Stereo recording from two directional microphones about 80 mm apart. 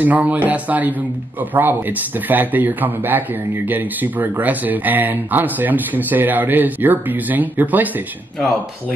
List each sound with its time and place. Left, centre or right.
0.0 s speech: centre